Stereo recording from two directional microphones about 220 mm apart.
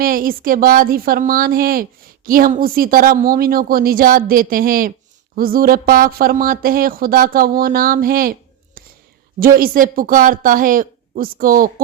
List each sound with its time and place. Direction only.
0.0 s a woman's voice: 40° right (ahead or behind)